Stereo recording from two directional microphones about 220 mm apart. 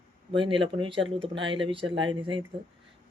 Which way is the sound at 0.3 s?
20° right (ahead or behind).